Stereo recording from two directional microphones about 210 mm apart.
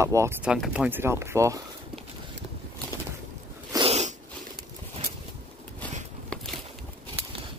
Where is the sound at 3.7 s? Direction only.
25° right (ahead or behind).